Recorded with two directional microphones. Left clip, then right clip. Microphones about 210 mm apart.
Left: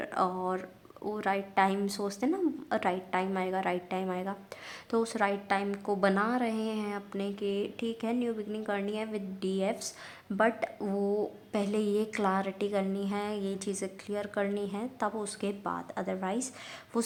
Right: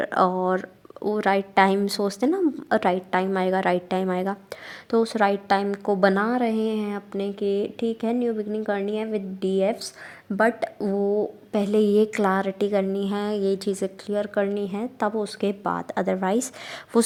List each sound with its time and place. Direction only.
0.0 s a woman's voice: 30° right (ahead or behind)
10.3 s a woman's voice: 15° right (ahead or behind); by 17.1 s 35° right (ahead or behind)